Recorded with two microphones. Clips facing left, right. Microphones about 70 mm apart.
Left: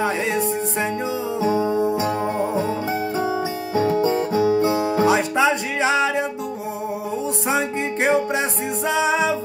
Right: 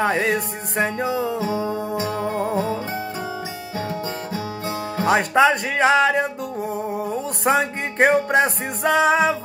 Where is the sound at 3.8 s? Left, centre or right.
Left.